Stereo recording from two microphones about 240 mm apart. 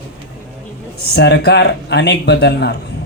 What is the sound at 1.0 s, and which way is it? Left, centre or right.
Speech, left.